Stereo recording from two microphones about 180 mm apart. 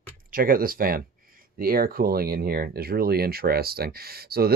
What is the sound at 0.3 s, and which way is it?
Speech, 55° right (ahead or behind).